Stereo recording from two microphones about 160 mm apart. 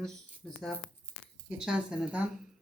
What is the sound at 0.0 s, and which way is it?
A woman's voice, centre (ahead or behind).